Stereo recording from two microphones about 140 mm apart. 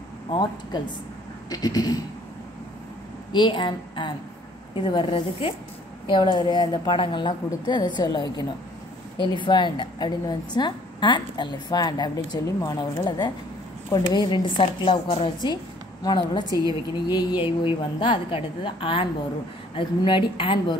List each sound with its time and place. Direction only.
0.3 s a woman's voice: 30° left (ahead or behind)
3.3 s a woman's voice: 35° left (ahead or behind)
15.4 s a woman's voice: 30° left (ahead or behind)
16.4 s a woman's voice: 25° right (ahead or behind)
17.1 s a woman's voice: 35° left (ahead or behind)